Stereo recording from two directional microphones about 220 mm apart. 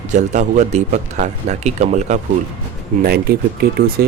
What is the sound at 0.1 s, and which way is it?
Speech, 35° right (ahead or behind).